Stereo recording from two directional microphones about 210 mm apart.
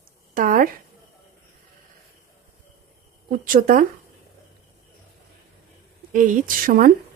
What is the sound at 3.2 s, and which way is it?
Speech, 40° right (ahead or behind).